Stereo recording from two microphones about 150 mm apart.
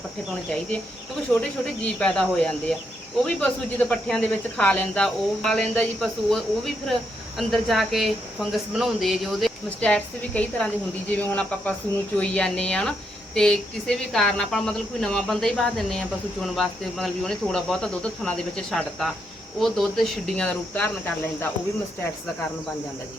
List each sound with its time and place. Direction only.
1.3 s speech: 10° left (ahead or behind)